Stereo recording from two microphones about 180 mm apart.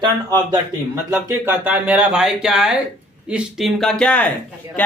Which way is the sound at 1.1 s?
15° right (ahead or behind).